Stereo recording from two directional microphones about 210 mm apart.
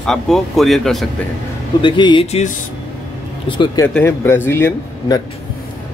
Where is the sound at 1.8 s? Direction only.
20° left (ahead or behind).